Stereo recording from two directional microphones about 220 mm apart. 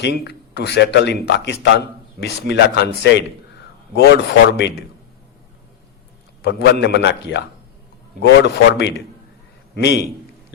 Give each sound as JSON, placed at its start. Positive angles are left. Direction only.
{"t": 0.0, "sound": "speech", "side_deg": 50}
{"t": 6.4, "sound": "speech", "side_deg": 50}